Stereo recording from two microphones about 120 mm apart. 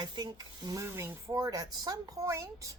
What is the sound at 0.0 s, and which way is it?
A woman's voice, 35° right (ahead or behind).